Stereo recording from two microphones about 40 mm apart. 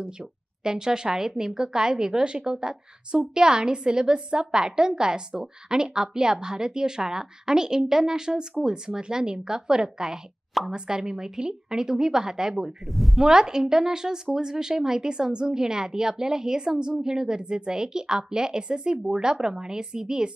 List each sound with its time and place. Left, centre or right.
0.7 s a woman's voice: centre
12.8 s a woman's voice: centre
13.2 s a woman's voice: centre